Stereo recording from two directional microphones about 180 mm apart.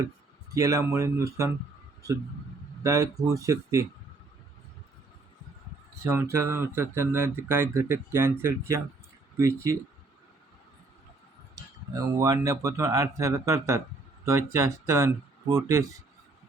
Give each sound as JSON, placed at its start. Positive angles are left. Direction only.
{"t": 0.5, "sound": "speech", "side_deg": -15}
{"t": 2.8, "sound": "speech", "side_deg": -20}
{"t": 6.0, "sound": "speech", "side_deg": -15}
{"t": 11.5, "sound": "speech", "side_deg": -20}